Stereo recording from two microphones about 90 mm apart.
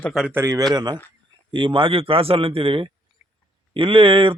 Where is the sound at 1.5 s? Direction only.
70° right (ahead or behind).